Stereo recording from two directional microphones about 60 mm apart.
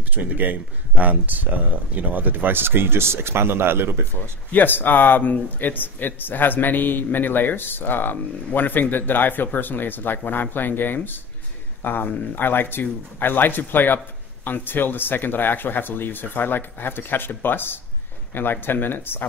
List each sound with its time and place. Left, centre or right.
0.1 s speech: right
4.5 s speech: left